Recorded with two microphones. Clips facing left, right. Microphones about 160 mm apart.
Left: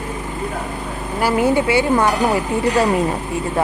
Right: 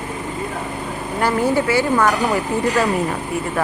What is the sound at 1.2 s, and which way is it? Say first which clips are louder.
Speech: left 2 dB; 10° left (ahead or behind).